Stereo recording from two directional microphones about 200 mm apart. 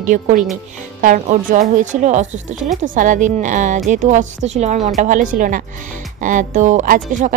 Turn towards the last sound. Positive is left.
turn(degrees=-40)  # may be behind; listen again after turning